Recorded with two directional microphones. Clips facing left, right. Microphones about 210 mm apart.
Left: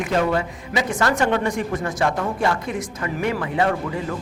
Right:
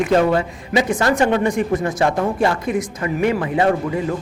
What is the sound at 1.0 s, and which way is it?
A woman's voice, 20° right (ahead or behind).